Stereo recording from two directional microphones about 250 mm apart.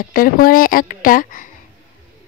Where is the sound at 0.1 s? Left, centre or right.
Left.